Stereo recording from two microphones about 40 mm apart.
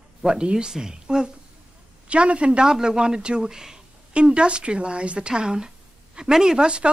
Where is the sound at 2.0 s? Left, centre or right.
Right.